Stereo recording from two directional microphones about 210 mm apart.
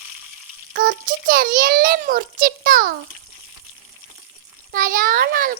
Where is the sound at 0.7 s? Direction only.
45° right (ahead or behind).